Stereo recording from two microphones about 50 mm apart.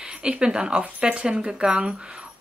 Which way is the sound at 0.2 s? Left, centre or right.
Right.